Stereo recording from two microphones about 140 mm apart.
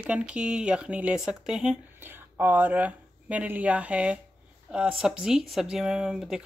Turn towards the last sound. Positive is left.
turn(degrees=-5)  # may be behind; listen again after turning